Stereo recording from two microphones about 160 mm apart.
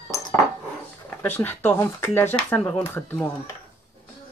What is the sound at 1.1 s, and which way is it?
Speech, 10° left (ahead or behind).